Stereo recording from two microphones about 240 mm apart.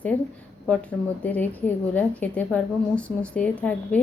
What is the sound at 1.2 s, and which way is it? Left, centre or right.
A woman's voice, centre.